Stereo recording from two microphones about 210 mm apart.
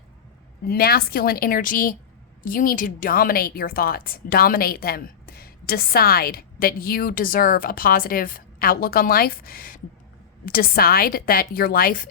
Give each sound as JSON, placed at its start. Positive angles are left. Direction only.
{"t": 0.6, "sound": "a woman's voice", "side_deg": 45}